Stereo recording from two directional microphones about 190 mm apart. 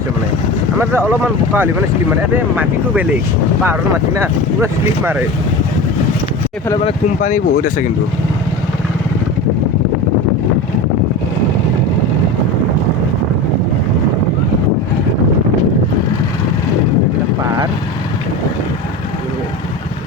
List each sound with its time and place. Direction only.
0.8 s speech: 10° right (ahead or behind)
6.8 s speech: 40° left (ahead or behind)